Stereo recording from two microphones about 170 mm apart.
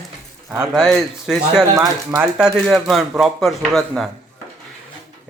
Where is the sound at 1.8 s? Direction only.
20° right (ahead or behind).